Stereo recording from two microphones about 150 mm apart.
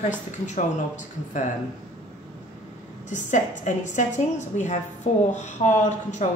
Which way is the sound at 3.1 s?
55° left (ahead or behind).